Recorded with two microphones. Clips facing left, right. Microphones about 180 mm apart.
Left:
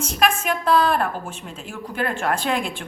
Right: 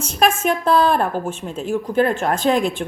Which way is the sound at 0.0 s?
25° right (ahead or behind).